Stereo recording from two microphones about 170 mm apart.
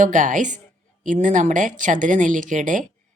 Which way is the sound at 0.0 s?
50° right (ahead or behind).